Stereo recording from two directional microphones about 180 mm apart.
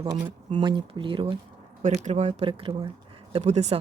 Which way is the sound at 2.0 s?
40° right (ahead or behind).